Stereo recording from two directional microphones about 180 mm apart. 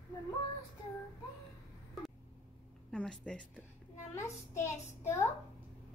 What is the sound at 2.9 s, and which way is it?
Speech, 5° left (ahead or behind).